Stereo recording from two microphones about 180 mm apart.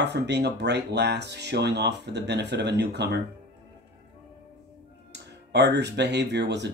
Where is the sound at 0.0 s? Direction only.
70° right (ahead or behind).